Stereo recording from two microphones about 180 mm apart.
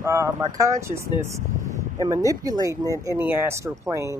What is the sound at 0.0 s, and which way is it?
Speech, 15° right (ahead or behind).